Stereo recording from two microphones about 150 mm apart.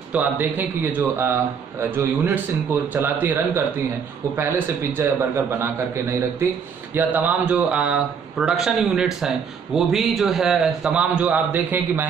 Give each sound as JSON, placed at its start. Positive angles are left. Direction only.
{"t": 0.1, "sound": "a man's voice", "side_deg": -10}